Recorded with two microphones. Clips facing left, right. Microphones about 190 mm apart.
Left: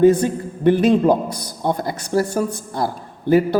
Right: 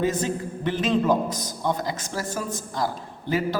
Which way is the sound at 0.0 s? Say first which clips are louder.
Left 10 dB; 50° left (ahead or behind).